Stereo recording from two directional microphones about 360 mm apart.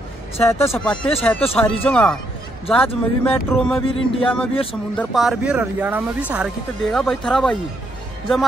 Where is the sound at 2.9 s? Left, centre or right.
Centre.